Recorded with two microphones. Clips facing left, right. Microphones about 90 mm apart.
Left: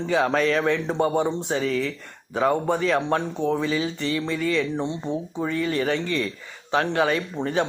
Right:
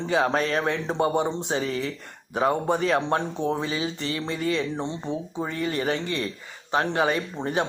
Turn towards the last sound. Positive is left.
turn(degrees=-20)  # may be behind; listen again after turning